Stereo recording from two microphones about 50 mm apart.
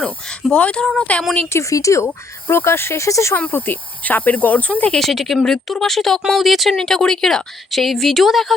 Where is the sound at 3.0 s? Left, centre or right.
Left.